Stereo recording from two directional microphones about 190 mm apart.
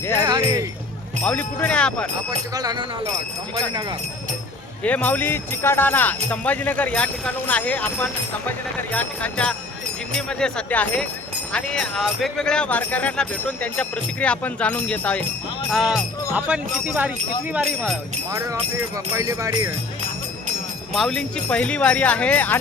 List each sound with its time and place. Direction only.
0.3 s jingle bell: 20° right (ahead or behind)
1.2 s speech: 10° left (ahead or behind)
2.5 s speech: 20° right (ahead or behind)
4.8 s speech: 5° left (ahead or behind); by 17.1 s 10° right (ahead or behind)
18.3 s speech: 15° right (ahead or behind)
20.9 s speech: 5° left (ahead or behind)